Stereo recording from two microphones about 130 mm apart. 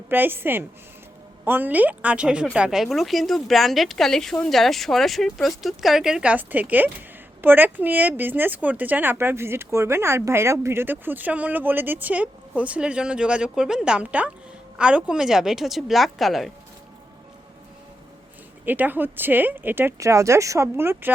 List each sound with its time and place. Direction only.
0.1 s speech: 15° right (ahead or behind); by 16.5 s centre (ahead or behind)
18.6 s speech: 15° right (ahead or behind)